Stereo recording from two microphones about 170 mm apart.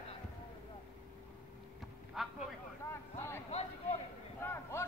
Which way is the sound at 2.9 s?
15° left (ahead or behind).